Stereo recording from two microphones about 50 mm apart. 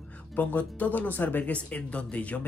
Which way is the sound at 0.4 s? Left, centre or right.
Left.